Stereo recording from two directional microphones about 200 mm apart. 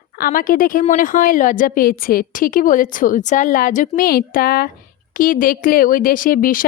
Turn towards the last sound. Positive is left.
turn(degrees=45)  # may be behind; listen again after turning